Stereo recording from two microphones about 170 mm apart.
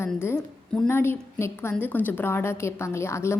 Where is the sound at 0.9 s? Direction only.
15° left (ahead or behind).